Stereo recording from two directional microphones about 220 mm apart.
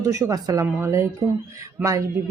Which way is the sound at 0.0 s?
15° right (ahead or behind).